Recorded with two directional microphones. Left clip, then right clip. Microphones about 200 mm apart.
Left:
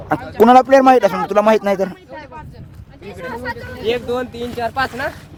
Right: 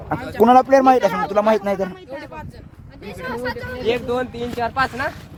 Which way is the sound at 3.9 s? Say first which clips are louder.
Left 2 dB; 55° left (ahead or behind).